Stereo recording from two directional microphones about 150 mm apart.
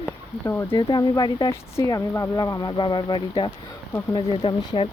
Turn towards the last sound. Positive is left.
turn(degrees=35)  # may be behind; listen again after turning